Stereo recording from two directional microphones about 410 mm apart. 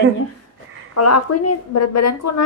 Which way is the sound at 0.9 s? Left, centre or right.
Left.